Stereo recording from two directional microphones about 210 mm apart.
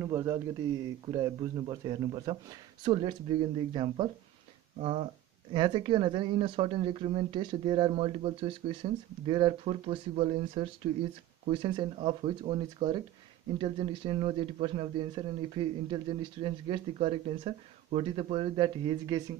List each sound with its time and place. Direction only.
0.0 s speech: 15° right (ahead or behind)